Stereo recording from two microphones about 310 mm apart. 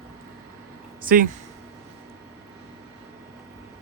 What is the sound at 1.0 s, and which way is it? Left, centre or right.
Speech, right.